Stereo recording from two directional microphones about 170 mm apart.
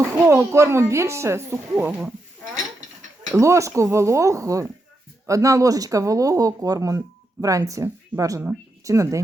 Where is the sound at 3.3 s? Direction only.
15° right (ahead or behind).